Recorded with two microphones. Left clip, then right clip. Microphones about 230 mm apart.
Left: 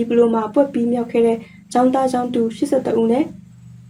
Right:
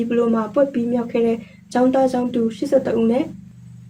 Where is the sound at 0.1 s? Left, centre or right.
Centre.